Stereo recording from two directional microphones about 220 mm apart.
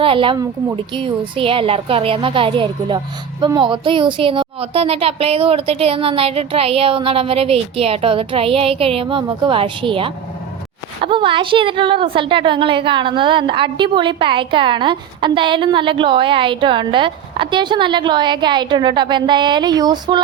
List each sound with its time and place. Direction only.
0.0 s a woman's voice: 25° right (ahead or behind)